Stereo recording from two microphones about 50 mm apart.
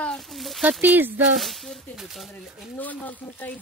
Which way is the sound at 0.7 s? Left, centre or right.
Right.